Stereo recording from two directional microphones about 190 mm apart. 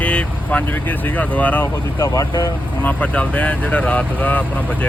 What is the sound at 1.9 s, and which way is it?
Speech, 20° left (ahead or behind).